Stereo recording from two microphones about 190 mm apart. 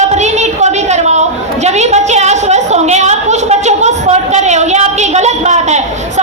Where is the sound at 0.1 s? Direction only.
35° right (ahead or behind).